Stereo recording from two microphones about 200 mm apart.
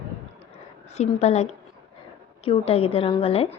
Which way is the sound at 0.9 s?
35° left (ahead or behind).